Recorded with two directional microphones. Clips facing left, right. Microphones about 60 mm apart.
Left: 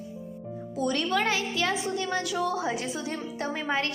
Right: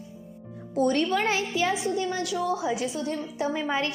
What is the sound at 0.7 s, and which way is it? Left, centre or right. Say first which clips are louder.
Speech: right 4 dB; right.